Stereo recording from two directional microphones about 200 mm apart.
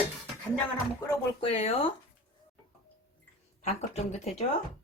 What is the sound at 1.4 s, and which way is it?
Speech, 30° left (ahead or behind).